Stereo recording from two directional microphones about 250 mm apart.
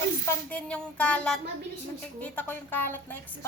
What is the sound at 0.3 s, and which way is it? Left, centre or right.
A woman's voice, centre.